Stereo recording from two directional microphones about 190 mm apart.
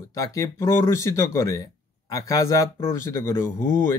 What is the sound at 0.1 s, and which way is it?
Speech, 15° left (ahead or behind).